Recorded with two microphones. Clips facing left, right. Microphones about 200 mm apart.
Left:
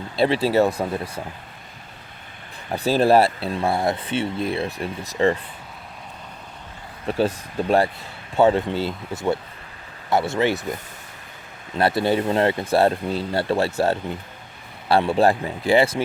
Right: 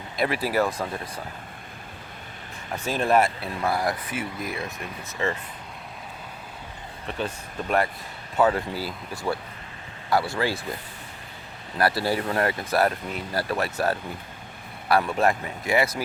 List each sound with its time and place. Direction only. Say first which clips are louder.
0.2 s speech: left 6 dB; 25° left (ahead or behind)
2.7 s speech: left 6 dB; 35° left (ahead or behind)
7.1 s speech: left 9 dB; 35° left (ahead or behind); by 10.6 s 20° left (ahead or behind)
11.8 s speech: left 4 dB; 20° left (ahead or behind)